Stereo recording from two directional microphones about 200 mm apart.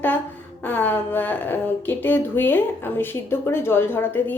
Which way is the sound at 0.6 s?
10° left (ahead or behind).